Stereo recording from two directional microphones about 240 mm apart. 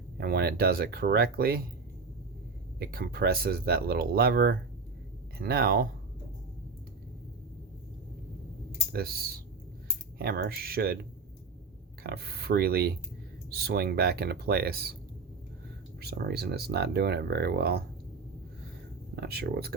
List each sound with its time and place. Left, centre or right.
0.2 s speech: right
2.7 s speech: right
8.9 s speech: right
12.0 s speech: right
16.0 s speech: right
19.1 s speech: right